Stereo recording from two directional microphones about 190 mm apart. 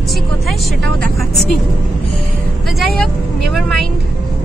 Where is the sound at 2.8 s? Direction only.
Centre (ahead or behind).